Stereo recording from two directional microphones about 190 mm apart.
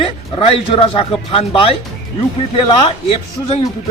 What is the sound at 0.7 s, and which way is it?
A man's voice, 30° left (ahead or behind).